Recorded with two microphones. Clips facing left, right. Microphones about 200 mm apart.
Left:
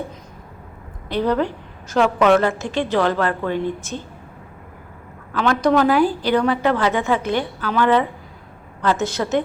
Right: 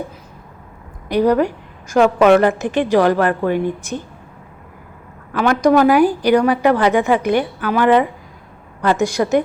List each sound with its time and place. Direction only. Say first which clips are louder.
1.0 s a woman's voice: right 5 dB; 10° right (ahead or behind)
5.3 s a woman's voice: right 4 dB; 15° right (ahead or behind)